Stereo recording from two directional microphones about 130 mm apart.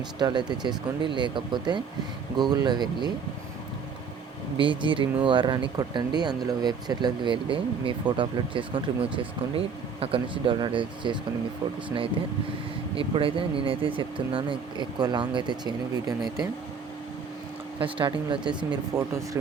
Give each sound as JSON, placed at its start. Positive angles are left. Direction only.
{"t": 0.2, "sound": "speech", "side_deg": -35}
{"t": 4.5, "sound": "speech", "side_deg": -40}
{"t": 13.0, "sound": "speech", "side_deg": -45}
{"t": 17.7, "sound": "speech", "side_deg": -40}
{"t": 18.9, "sound": "speech", "side_deg": -25}